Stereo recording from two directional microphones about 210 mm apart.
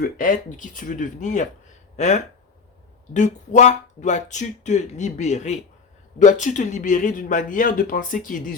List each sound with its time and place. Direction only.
0.2 s speech: 40° left (ahead or behind)